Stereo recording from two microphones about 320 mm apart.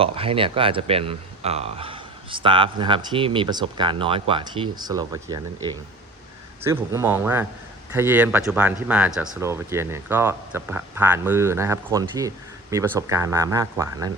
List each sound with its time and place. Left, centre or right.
0.0 s speech: centre
6.6 s speech: centre